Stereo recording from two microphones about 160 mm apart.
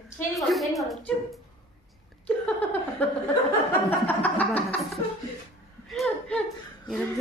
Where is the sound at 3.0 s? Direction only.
10° left (ahead or behind).